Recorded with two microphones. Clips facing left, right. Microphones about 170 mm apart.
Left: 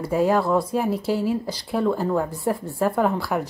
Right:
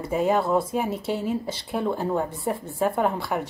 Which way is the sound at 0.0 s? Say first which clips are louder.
Left 2 dB; centre (ahead or behind).